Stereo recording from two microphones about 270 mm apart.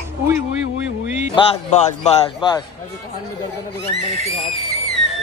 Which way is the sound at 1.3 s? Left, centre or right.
Left.